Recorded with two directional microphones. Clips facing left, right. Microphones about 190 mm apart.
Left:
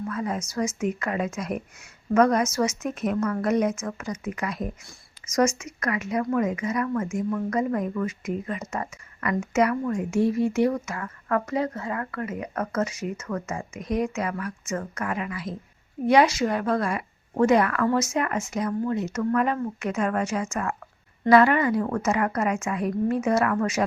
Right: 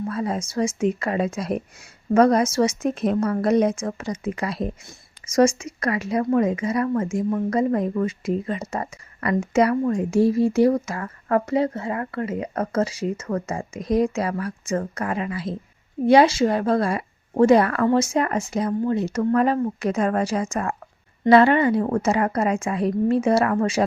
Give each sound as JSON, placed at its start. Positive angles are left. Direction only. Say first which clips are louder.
{"t": 0.0, "sound": "a woman's voice", "louder": "right 3 dB", "side_deg": -30}